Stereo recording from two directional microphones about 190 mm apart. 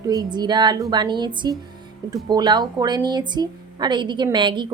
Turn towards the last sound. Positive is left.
turn(degrees=-25)  # may be behind; listen again after turning